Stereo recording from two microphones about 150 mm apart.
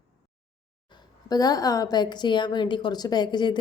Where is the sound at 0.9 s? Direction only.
25° left (ahead or behind).